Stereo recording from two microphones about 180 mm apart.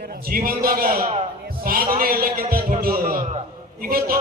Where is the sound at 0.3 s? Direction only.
55° right (ahead or behind).